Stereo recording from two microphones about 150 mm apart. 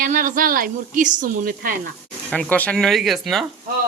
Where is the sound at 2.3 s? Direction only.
10° left (ahead or behind).